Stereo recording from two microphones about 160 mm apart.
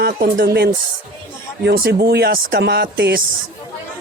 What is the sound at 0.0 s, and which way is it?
Speech, 65° right (ahead or behind).